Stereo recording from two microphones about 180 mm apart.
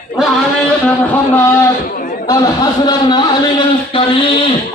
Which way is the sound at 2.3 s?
20° left (ahead or behind).